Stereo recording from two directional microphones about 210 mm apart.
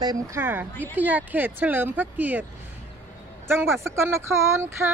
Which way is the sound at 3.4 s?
10° right (ahead or behind).